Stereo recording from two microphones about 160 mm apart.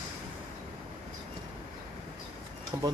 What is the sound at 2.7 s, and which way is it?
Speech, 20° right (ahead or behind).